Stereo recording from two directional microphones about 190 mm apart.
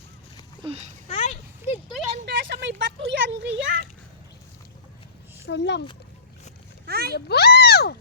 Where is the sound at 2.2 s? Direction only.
65° right (ahead or behind).